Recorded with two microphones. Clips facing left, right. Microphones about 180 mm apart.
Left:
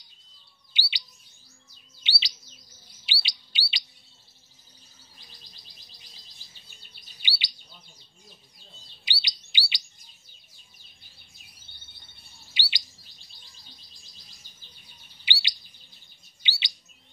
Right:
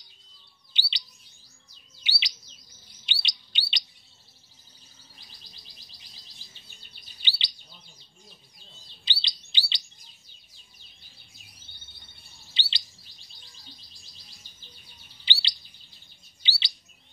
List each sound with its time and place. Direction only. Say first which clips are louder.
0.7 s chirp: left 1 dB; 10° left (ahead or behind)
2.0 s chirp: left 1 dB; 35° left (ahead or behind)
3.1 s chirp: left 1 dB; 5° left (ahead or behind)
7.2 s bird vocalization: left 1 dB; 10° left (ahead or behind)
9.0 s chirp: even; 10° left (ahead or behind)
12.5 s chirp: left 1 dB; 10° left (ahead or behind)
15.2 s chirp: left 1 dB; 15° left (ahead or behind)